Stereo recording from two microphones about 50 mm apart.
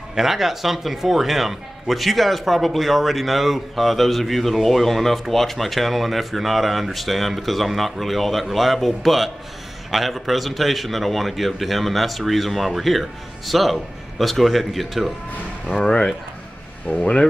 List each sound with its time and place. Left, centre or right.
0.1 s speech: centre
16.8 s speech: left